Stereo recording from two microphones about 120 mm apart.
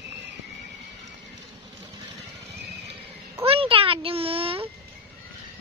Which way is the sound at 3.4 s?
50° right (ahead or behind).